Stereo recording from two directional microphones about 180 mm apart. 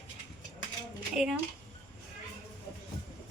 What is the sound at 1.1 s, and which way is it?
Speech, 5° right (ahead or behind).